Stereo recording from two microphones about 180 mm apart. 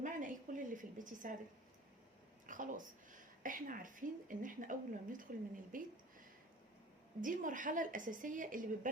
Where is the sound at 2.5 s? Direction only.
45° right (ahead or behind).